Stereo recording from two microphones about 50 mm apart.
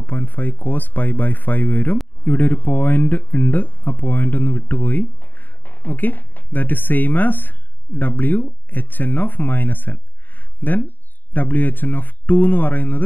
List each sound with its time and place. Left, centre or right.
0.0 s speech: left